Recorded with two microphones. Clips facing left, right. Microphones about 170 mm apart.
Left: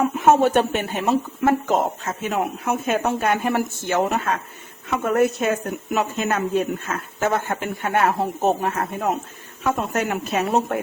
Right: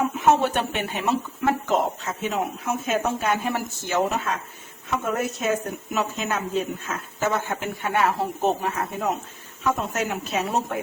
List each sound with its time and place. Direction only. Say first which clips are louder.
0.2 s speech: left 5 dB; 50° left (ahead or behind)